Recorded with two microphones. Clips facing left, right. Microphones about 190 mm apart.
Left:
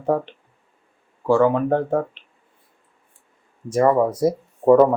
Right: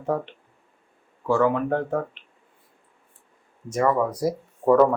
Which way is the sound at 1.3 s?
30° left (ahead or behind).